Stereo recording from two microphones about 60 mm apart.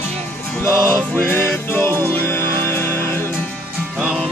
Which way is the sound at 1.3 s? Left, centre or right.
Left.